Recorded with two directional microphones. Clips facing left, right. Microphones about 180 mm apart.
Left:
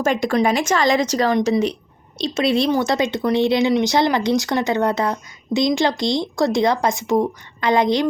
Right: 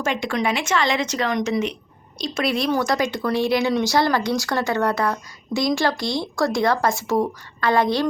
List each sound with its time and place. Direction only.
0.0 s a woman's voice: 40° left (ahead or behind); by 8.0 s 20° left (ahead or behind)